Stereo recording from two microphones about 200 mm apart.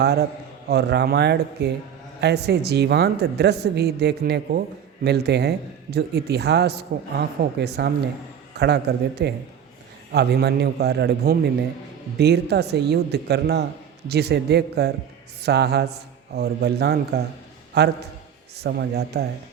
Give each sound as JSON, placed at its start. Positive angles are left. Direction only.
{"t": 0.0, "sound": "a man's voice", "side_deg": -55}